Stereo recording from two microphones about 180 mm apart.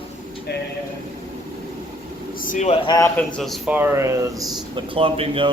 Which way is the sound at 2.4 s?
45° left (ahead or behind).